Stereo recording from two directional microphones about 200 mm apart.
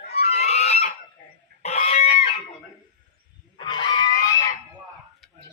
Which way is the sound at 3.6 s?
20° left (ahead or behind).